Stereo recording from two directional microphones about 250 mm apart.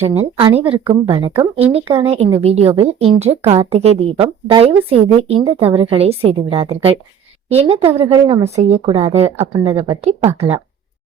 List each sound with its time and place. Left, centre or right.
0.0 s a woman's voice: right